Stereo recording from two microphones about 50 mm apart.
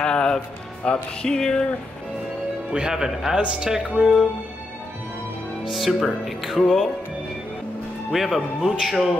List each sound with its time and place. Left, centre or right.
0.0 s music: centre
1.2 s a sound: centre
2.7 s speech: centre
5.7 s speech: centre
8.1 s speech: centre